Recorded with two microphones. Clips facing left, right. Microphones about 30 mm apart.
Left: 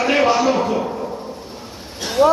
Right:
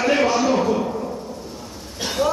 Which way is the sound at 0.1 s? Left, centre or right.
Left.